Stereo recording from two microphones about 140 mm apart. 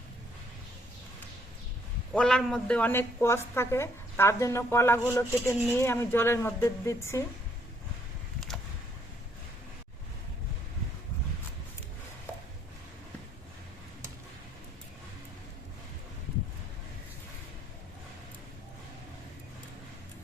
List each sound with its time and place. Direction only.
2.1 s a woman's voice: 5° left (ahead or behind); by 7.3 s 20° left (ahead or behind)